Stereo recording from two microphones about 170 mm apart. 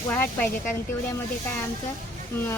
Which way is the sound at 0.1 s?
10° left (ahead or behind).